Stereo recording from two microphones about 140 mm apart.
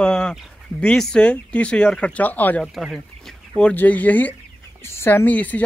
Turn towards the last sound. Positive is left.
turn(degrees=10)  # may be behind; listen again after turning